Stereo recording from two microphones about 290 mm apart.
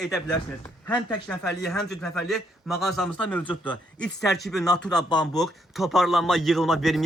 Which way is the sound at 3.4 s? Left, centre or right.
Centre.